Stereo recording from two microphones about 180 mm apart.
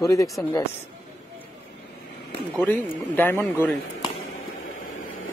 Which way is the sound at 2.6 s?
10° left (ahead or behind).